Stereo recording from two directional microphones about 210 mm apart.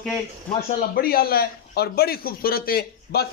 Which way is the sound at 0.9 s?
45° left (ahead or behind).